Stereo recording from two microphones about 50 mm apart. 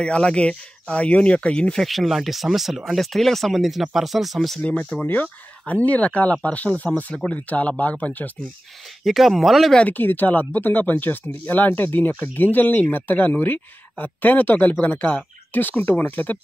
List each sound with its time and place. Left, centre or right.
0.0 s speech: left
1.8 s speech: centre
4.6 s speech: left
9.0 s speech: centre
9.8 s speech: left